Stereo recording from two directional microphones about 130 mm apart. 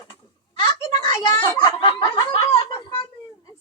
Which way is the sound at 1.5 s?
35° left (ahead or behind).